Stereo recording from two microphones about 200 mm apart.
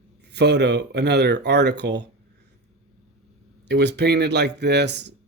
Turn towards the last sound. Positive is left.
turn(degrees=-60)  # may be behind; listen again after turning